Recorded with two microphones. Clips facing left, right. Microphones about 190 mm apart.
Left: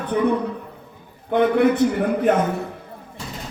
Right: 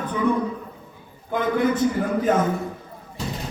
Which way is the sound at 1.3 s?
65° left (ahead or behind).